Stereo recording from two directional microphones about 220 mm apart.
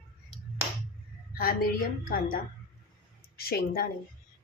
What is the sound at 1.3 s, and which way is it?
A woman's voice, 40° left (ahead or behind).